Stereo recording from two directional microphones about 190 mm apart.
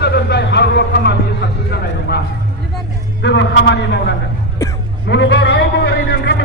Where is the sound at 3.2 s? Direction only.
65° left (ahead or behind).